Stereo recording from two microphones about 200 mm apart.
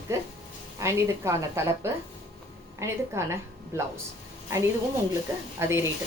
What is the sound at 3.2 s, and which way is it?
Speech, 15° right (ahead or behind).